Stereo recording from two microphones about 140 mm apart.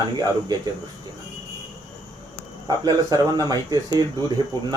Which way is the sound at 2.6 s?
30° right (ahead or behind).